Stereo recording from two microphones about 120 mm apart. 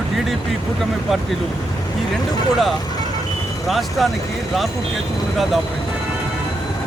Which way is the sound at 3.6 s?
Centre (ahead or behind).